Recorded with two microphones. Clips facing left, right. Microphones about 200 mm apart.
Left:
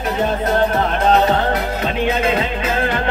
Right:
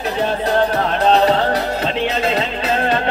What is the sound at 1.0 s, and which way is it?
Music, 30° right (ahead or behind).